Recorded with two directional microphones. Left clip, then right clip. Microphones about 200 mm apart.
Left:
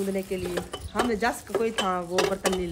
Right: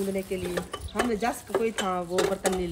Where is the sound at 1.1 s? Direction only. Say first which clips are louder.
Left 1 dB; centre (ahead or behind).